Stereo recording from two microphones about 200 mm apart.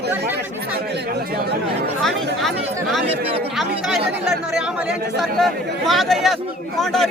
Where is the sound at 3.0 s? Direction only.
30° right (ahead or behind).